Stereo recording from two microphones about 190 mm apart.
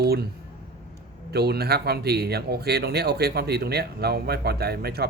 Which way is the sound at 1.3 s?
60° right (ahead or behind).